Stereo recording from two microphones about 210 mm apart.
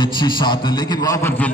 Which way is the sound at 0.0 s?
20° left (ahead or behind).